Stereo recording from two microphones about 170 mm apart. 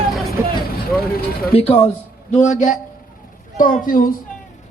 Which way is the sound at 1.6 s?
35° left (ahead or behind).